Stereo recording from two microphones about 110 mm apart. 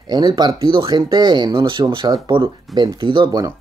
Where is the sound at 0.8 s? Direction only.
40° right (ahead or behind).